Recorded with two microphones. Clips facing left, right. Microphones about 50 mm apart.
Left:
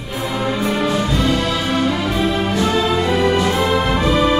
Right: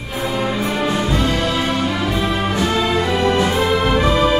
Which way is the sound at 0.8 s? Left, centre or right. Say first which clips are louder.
Right 1 dB; right.